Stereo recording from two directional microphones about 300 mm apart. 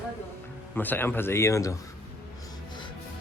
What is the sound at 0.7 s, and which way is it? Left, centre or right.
A man's voice, centre.